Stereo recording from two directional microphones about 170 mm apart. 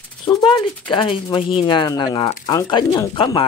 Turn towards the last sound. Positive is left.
turn(degrees=30)  # may be behind; listen again after turning